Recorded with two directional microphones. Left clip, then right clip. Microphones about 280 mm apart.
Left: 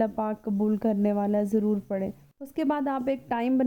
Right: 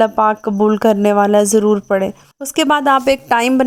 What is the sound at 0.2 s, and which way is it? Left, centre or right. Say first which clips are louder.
A woman's voice: right 16 dB; centre.